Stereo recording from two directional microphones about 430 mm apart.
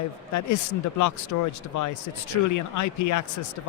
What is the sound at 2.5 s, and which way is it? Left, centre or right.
Speech, left.